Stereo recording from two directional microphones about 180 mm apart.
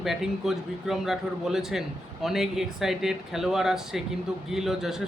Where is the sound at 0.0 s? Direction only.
Centre (ahead or behind).